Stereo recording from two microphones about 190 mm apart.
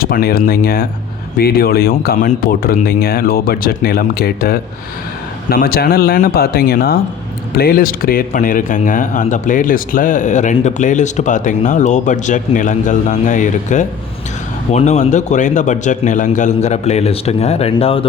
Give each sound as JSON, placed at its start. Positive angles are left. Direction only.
{"t": 0.0, "sound": "speech", "side_deg": 50}